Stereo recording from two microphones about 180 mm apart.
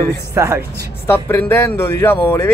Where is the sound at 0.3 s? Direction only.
15° right (ahead or behind).